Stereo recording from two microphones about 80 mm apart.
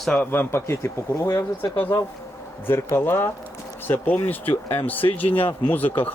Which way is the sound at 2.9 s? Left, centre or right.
Left.